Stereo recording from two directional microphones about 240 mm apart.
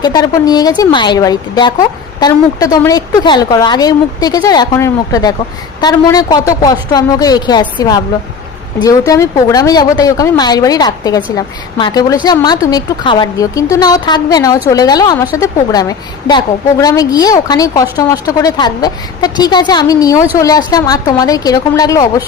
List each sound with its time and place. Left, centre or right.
0.0 s a woman's voice: centre